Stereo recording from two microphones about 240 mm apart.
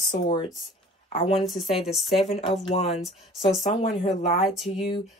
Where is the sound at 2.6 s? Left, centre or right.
Left.